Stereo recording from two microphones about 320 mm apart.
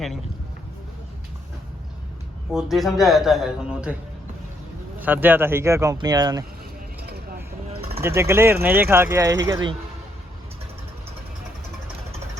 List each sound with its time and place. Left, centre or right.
2.5 s speech: centre
4.9 s speech: centre
7.0 s vehicle: right
7.7 s a sound: centre
8.0 s speech: centre